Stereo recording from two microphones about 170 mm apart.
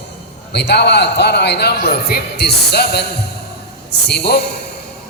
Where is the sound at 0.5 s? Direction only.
80° left.